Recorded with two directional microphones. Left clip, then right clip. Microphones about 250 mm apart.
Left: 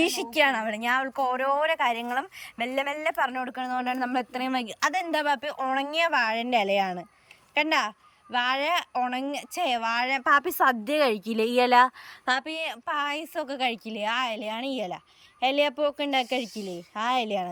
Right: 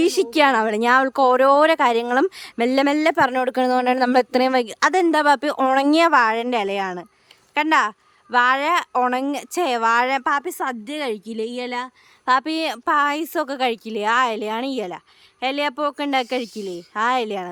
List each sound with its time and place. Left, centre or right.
0.0 s a woman's voice: centre
10.3 s a woman's voice: centre
12.2 s a woman's voice: centre